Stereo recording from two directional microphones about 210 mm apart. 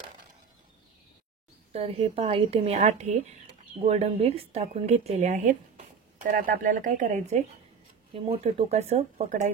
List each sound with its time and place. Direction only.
1.7 s speech: 30° right (ahead or behind)